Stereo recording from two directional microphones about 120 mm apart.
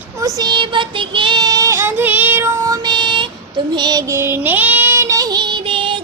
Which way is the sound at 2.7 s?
40° right (ahead or behind).